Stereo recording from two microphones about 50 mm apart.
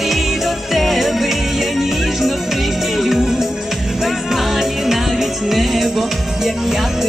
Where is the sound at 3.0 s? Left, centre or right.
Centre.